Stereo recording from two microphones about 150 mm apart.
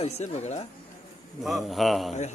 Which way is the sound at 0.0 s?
45° left (ahead or behind).